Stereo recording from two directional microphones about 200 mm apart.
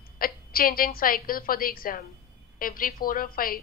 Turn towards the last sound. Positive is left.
turn(degrees=45)  # may be behind; listen again after turning